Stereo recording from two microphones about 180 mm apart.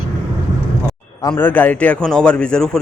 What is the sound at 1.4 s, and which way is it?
Speech, 10° left (ahead or behind).